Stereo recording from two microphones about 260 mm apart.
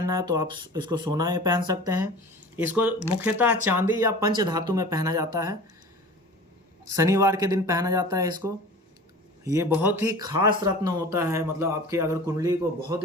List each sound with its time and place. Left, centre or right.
0.1 s speech: centre
6.8 s speech: centre